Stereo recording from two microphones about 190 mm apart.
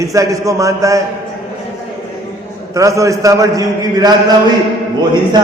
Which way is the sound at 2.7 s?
15° right (ahead or behind).